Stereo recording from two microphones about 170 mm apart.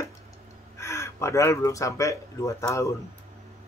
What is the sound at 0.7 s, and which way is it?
Speech, 15° left (ahead or behind).